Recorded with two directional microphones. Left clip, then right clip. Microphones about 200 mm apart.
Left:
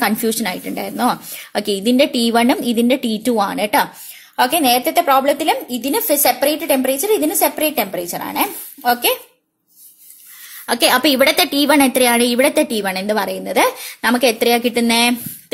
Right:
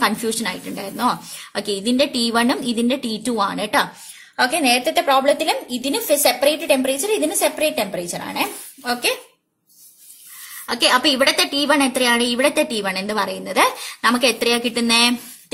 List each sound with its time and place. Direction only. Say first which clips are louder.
0.0 s a woman's voice: left 2 dB; 30° left (ahead or behind)
10.7 s a woman's voice: left 2 dB; 35° left (ahead or behind)